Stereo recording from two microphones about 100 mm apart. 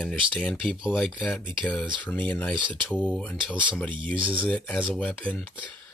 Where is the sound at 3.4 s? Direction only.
10° right (ahead or behind).